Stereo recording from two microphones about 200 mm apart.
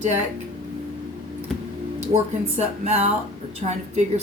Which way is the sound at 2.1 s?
35° right (ahead or behind).